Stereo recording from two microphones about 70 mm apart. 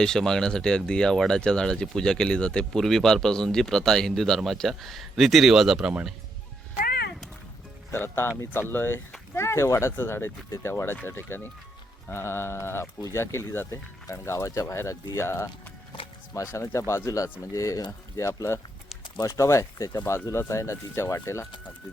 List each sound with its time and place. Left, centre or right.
0.0 s speech: centre
7.9 s speech: left
19.1 s speech: left
19.4 s speech: left
20.1 s speech: left